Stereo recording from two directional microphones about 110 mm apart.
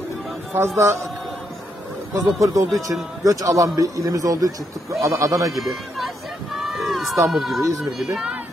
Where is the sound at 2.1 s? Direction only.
30° right (ahead or behind).